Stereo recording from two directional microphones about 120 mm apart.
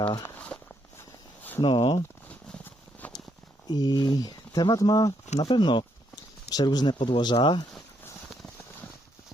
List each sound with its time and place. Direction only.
0.3 s walk: 10° left (ahead or behind)
1.4 s a sound: 15° left (ahead or behind)
1.6 s speech: 45° left (ahead or behind)
2.3 s a sound: 15° left (ahead or behind)
3.7 s speech: 35° left (ahead or behind)
5.4 s speech: 40° left (ahead or behind)